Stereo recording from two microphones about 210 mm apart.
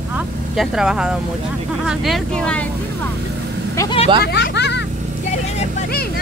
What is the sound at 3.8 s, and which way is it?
Vehicle, 20° left (ahead or behind).